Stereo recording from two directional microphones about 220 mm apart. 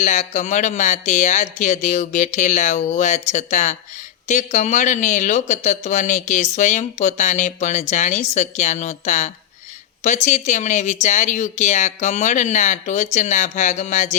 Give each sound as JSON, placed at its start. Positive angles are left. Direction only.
{"t": 0.0, "sound": "speech", "side_deg": 35}